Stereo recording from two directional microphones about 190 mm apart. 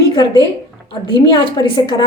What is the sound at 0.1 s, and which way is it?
A woman's voice, 25° left (ahead or behind).